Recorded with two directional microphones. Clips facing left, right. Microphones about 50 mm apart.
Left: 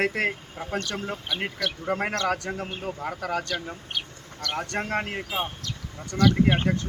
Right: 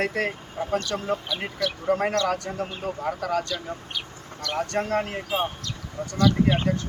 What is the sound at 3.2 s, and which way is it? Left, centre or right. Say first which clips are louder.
Speech: right 2 dB; left.